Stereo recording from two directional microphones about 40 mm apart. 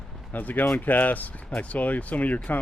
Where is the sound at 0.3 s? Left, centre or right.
Left.